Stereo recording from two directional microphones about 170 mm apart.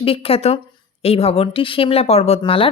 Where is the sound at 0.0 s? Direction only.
35° left (ahead or behind).